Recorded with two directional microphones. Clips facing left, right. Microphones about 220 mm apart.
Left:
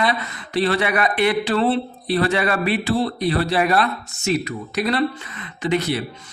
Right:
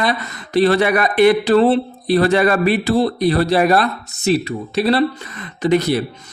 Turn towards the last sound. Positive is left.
turn(degrees=-40)  # may be behind; listen again after turning